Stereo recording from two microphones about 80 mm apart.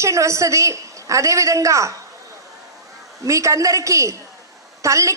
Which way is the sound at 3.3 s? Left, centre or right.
Right.